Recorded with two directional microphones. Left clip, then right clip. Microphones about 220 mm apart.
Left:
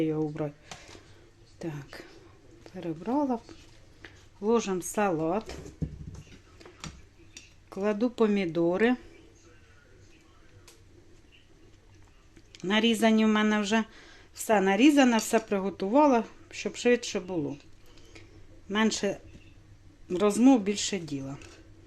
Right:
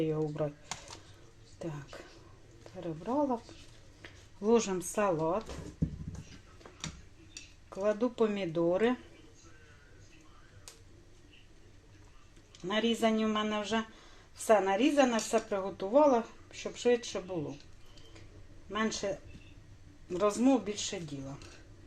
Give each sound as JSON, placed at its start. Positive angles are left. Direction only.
{"t": 0.0, "sound": "speech", "side_deg": 25}
{"t": 1.5, "sound": "a woman's voice", "side_deg": 30}
{"t": 4.0, "sound": "speech", "side_deg": 5}
{"t": 7.7, "sound": "a woman's voice", "side_deg": 35}
{"t": 12.6, "sound": "a woman's voice", "side_deg": 35}
{"t": 18.7, "sound": "a woman's voice", "side_deg": 40}